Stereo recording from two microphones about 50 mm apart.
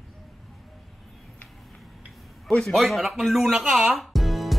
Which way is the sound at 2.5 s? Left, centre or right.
Left.